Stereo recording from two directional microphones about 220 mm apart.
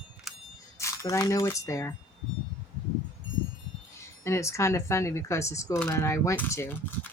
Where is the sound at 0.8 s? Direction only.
15° left (ahead or behind).